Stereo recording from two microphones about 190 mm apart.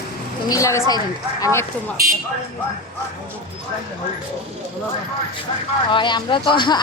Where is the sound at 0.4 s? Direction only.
15° left (ahead or behind).